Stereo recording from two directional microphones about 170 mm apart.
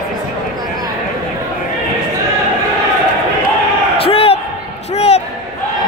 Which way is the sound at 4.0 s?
35° left (ahead or behind).